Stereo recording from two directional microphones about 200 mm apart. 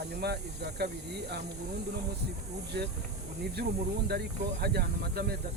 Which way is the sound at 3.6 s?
55° right (ahead or behind).